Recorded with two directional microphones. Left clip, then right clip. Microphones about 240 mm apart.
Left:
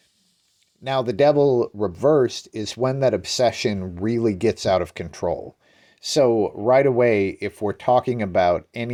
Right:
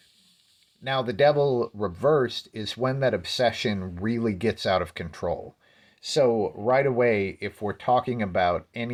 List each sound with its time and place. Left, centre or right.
0.9 s speech: left